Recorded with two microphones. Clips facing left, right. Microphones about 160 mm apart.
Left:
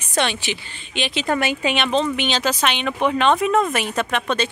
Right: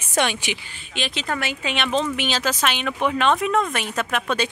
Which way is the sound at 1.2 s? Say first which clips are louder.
Left 7 dB; 25° left (ahead or behind).